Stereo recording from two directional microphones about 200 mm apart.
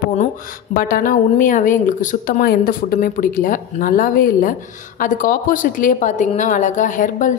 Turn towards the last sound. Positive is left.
turn(degrees=40)  # may be behind; listen again after turning